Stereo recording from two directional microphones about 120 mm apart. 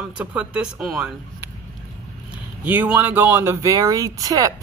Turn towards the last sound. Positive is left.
turn(degrees=-30)  # may be behind; listen again after turning